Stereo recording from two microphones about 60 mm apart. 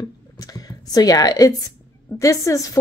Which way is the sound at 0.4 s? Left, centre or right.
Left.